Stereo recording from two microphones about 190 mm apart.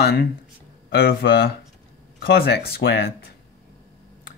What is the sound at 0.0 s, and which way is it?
Speech, 55° left (ahead or behind).